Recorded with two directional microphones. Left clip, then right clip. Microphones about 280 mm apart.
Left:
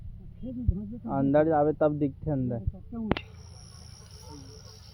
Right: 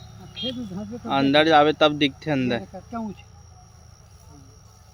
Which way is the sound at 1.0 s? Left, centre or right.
Centre.